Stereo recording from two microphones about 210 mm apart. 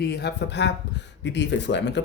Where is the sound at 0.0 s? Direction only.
50° left (ahead or behind).